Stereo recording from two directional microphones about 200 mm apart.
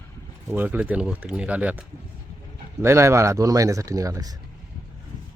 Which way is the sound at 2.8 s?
15° right (ahead or behind).